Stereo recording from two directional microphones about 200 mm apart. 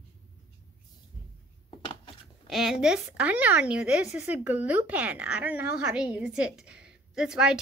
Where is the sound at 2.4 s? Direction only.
Centre (ahead or behind).